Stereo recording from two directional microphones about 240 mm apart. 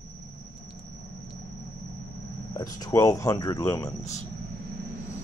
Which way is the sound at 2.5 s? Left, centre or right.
Centre.